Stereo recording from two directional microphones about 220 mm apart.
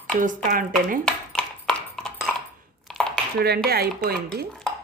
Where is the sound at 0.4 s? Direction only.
40° right (ahead or behind).